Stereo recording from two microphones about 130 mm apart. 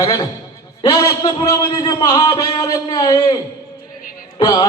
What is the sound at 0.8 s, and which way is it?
A man's voice, 25° left (ahead or behind).